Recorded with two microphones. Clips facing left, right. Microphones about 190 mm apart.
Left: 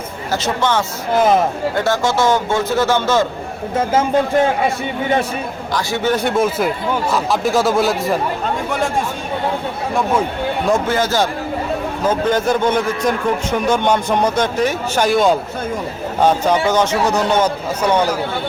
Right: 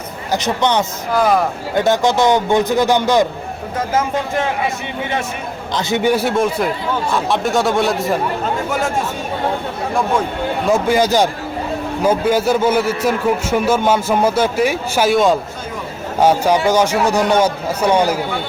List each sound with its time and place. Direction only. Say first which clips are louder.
0.3 s speech: right 1 dB; 20° right (ahead or behind)
1.1 s speech: left 1 dB; 20° left (ahead or behind)
1.7 s a man's voice: right 7 dB; 20° right (ahead or behind)
5.7 s a man's voice: right 2 dB; 15° right (ahead or behind); by 8.2 s centre (ahead or behind)
9.9 s speech: even; 5° left (ahead or behind)
10.7 s a man's voice: right 3 dB; 15° right (ahead or behind)